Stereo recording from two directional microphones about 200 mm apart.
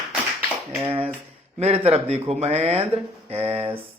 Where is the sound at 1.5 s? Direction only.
30° right (ahead or behind).